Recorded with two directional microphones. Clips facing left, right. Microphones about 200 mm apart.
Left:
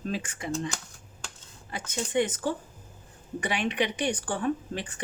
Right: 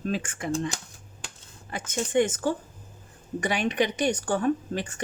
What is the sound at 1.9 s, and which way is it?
Speech, 45° right (ahead or behind).